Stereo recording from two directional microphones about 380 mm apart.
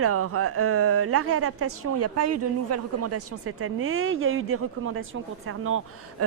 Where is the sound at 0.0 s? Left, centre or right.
Right.